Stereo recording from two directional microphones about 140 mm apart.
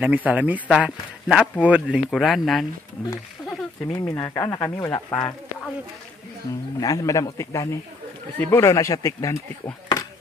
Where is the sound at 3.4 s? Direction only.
30° left (ahead or behind).